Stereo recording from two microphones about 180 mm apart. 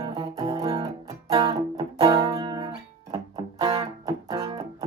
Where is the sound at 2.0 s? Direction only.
30° right (ahead or behind).